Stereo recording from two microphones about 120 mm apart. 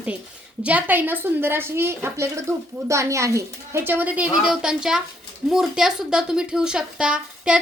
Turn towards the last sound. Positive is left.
turn(degrees=-5)  # may be behind; listen again after turning